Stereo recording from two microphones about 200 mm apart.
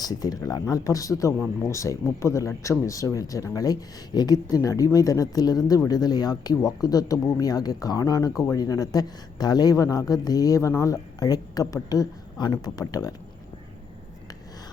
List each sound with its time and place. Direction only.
0.0 s speech: 20° left (ahead or behind)